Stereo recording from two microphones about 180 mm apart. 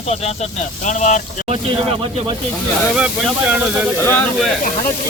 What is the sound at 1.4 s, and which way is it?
Speech, 35° right (ahead or behind).